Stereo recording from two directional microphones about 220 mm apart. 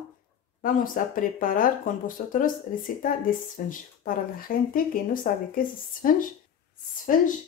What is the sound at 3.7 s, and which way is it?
Speech, 40° left (ahead or behind).